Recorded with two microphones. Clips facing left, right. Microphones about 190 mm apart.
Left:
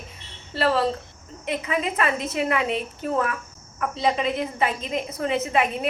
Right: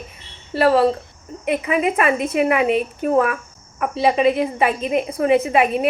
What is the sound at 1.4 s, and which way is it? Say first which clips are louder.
A woman's voice: right 7 dB; 15° right (ahead or behind).